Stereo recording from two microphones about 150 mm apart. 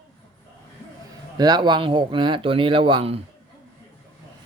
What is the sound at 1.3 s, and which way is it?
Speech, 30° right (ahead or behind).